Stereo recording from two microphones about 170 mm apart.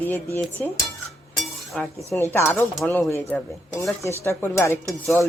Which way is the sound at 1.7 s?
5° left (ahead or behind).